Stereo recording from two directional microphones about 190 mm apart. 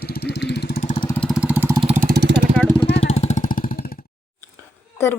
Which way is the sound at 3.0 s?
35° left (ahead or behind).